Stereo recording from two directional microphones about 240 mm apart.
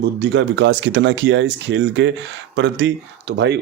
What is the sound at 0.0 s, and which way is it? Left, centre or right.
Speech, right.